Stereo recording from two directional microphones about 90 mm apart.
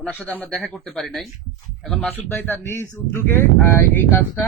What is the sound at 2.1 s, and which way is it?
Speech, 20° left (ahead or behind).